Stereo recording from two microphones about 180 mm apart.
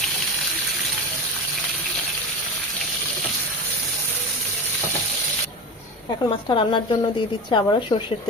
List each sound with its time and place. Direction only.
6.2 s a woman's voice: 30° left (ahead or behind)